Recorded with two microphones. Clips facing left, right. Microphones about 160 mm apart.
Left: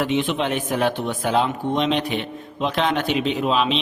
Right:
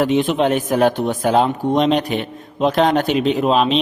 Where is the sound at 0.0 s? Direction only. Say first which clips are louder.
Right 6 dB; 40° right (ahead or behind).